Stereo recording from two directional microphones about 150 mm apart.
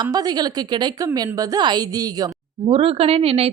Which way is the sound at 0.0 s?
25° right (ahead or behind).